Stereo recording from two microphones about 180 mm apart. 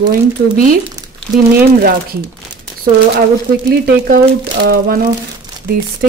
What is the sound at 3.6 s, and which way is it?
Speech, 55° right (ahead or behind).